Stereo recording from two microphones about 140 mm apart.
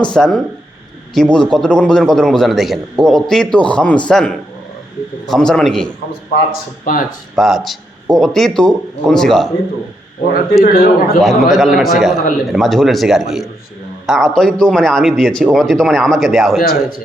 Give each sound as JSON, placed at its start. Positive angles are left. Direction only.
{"t": 0.0, "sound": "a man's voice", "side_deg": 5}
{"t": 6.5, "sound": "a man's voice", "side_deg": 85}
{"t": 7.3, "sound": "a man's voice", "side_deg": 0}
{"t": 10.6, "sound": "a man's voice", "side_deg": 85}
{"t": 11.2, "sound": "a man's voice", "side_deg": 0}